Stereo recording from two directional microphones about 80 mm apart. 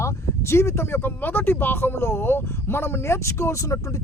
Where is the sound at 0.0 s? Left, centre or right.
Left.